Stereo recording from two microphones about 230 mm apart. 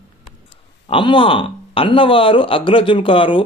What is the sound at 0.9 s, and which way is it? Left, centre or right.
Speech, left.